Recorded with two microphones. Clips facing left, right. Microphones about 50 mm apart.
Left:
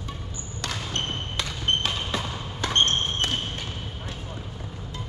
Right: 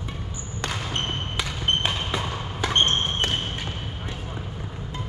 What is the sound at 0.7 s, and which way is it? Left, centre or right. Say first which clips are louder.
Basketball bounce: right 1 dB; centre.